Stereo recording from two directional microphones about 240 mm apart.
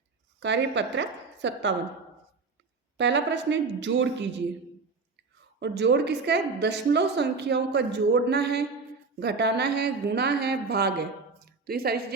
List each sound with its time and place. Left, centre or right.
0.3 s a woman's voice: right
3.0 s a woman's voice: right
5.5 s a woman's voice: right
11.4 s a sound: right